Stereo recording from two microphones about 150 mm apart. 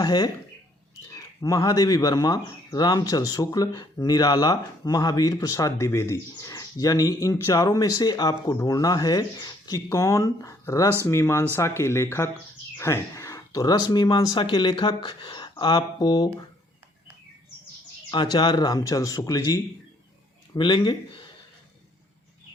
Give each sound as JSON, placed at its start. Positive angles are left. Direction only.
{"t": 0.0, "sound": "speech", "side_deg": 25}
{"t": 18.1, "sound": "speech", "side_deg": 30}